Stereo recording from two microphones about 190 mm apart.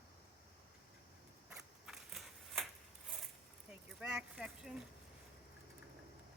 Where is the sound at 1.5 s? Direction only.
5° right (ahead or behind).